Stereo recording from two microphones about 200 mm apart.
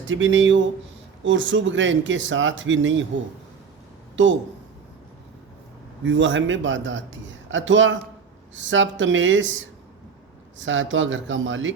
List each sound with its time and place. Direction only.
0.1 s speech: 75° right (ahead or behind)
4.2 s speech: 70° right (ahead or behind)
6.1 s speech: 65° right (ahead or behind)